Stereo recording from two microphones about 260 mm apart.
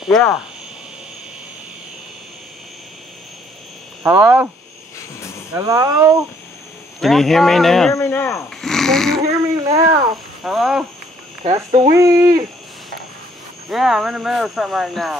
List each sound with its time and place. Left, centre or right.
0.0 s speech: centre
4.0 s speech: centre
5.5 s speech: centre
7.0 s speech: centre
9.6 s a sound: centre
10.4 s speech: centre
11.4 s speech: right
11.9 s speech: centre
13.7 s speech: centre